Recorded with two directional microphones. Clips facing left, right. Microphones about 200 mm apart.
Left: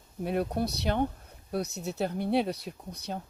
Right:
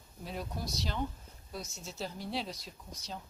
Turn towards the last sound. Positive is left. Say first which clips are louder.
# left 8 dB
turn(degrees=60)  # may be behind; listen again after turning